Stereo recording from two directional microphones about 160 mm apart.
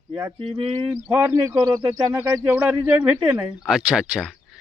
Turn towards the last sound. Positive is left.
turn(degrees=-5)  # may be behind; listen again after turning